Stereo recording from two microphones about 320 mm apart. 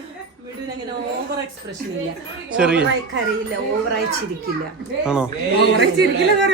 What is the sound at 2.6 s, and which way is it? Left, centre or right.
Speech, centre.